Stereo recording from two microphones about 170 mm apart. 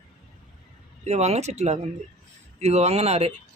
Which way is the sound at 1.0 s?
40° right (ahead or behind).